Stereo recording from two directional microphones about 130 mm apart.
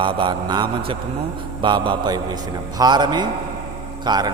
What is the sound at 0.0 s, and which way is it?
A man's voice, 40° right (ahead or behind).